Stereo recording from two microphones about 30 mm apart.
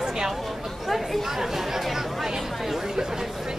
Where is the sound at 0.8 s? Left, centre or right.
Centre.